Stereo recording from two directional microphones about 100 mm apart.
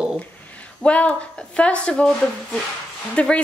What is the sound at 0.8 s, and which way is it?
A woman's voice, 10° left (ahead or behind).